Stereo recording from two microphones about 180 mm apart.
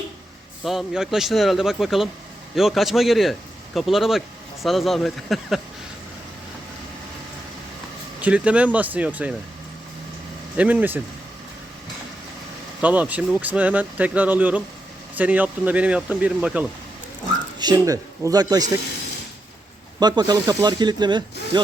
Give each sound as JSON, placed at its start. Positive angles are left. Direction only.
{"t": 0.6, "sound": "a man's voice", "side_deg": 0}
{"t": 8.2, "sound": "speech", "side_deg": -5}
{"t": 10.6, "sound": "speech", "side_deg": -10}
{"t": 12.8, "sound": "speech", "side_deg": -10}
{"t": 17.6, "sound": "speech", "side_deg": -20}
{"t": 20.0, "sound": "speech", "side_deg": -25}